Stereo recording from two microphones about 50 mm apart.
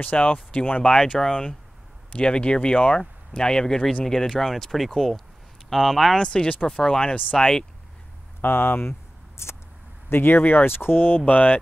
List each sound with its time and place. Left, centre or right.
0.0 s speech: left; by 6.1 s centre
6.1 s speech: centre
8.4 s speech: left
9.4 s vehicle: left
10.0 s speech: left
11.2 s mantra: left